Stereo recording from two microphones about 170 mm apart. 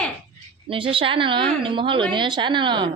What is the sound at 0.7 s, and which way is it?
A woman's voice, 30° right (ahead or behind).